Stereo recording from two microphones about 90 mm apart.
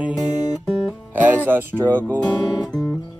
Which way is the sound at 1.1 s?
20° right (ahead or behind).